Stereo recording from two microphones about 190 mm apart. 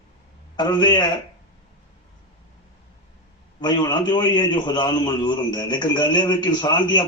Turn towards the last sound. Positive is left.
turn(degrees=25)  # may be behind; listen again after turning